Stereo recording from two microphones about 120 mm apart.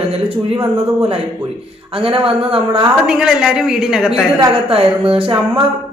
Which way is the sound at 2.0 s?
50° right (ahead or behind).